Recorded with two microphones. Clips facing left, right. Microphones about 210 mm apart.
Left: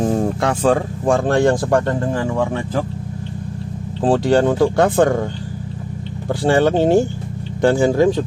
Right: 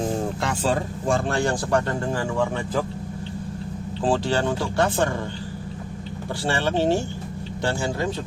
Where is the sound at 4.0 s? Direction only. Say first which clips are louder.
Left 8 dB; 50° left (ahead or behind).